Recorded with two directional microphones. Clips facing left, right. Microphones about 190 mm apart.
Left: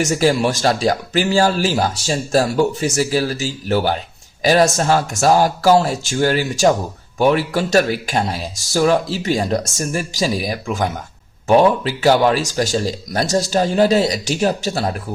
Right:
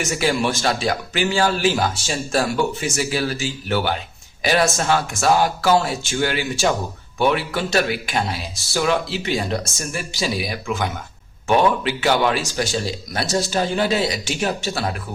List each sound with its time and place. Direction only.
0.0 s speech: 40° left (ahead or behind)